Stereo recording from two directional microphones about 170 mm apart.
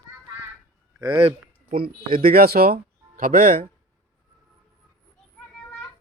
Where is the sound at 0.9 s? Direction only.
30° right (ahead or behind).